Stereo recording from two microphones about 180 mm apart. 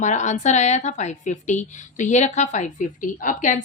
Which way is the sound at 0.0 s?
40° left (ahead or behind).